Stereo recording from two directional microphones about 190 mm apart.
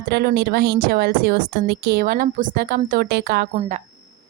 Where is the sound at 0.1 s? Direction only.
55° right (ahead or behind).